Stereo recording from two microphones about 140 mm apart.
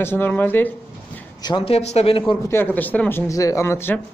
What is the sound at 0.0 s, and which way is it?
Speech, 15° left (ahead or behind).